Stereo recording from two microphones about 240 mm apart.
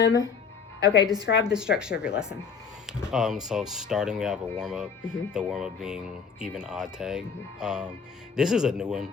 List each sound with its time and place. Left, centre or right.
0.9 s a woman's voice: centre
1.5 s speech: centre